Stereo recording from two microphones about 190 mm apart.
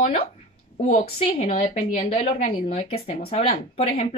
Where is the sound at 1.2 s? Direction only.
30° left (ahead or behind).